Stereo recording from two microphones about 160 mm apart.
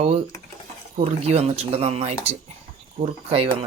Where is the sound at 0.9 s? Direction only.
40° right (ahead or behind).